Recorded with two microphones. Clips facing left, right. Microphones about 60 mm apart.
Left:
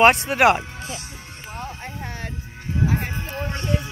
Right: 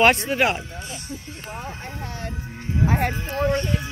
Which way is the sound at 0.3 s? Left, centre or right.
Left.